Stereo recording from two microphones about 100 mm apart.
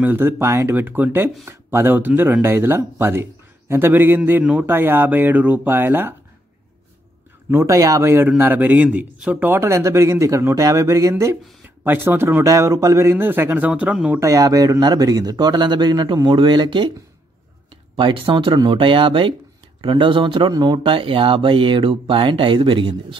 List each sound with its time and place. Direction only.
0.0 s speech: 20° right (ahead or behind)
0.7 s speech: 20° right (ahead or behind)
7.5 s speech: 30° right (ahead or behind)
11.8 s speech: 20° right (ahead or behind)
14.2 s speech: 35° right (ahead or behind); by 16.9 s 50° right (ahead or behind)
17.9 s speech: 60° right (ahead or behind)